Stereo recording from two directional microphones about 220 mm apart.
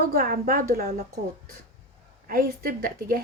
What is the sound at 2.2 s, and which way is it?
Speech, 40° right (ahead or behind).